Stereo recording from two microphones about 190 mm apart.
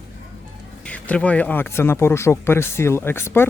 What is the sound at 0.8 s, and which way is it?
Speech, 5° left (ahead or behind).